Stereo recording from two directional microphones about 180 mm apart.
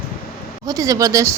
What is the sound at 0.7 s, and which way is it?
Speech, 20° right (ahead or behind).